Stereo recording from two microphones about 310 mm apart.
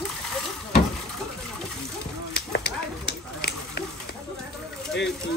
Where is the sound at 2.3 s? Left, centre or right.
Left.